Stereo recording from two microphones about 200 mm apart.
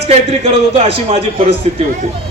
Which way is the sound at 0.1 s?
30° right (ahead or behind).